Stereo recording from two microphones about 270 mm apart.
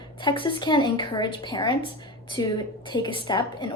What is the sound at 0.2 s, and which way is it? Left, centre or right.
A woman's voice, centre.